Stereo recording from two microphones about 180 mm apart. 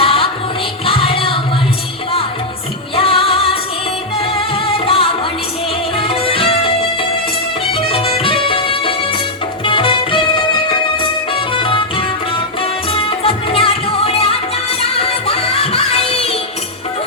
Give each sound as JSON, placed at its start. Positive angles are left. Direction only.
{"t": 0.0, "sound": "music", "side_deg": 30}
{"t": 2.9, "sound": "music", "side_deg": 30}